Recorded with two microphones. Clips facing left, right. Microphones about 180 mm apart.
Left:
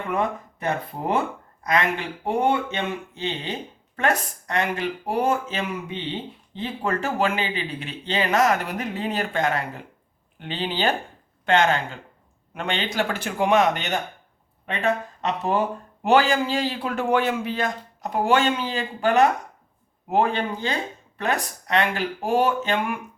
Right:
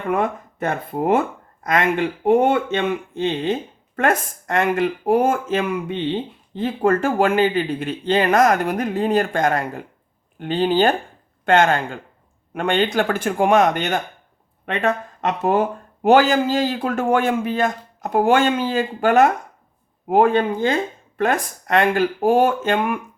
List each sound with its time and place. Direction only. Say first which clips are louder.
0.1 s speech: right 5 dB; 50° right (ahead or behind)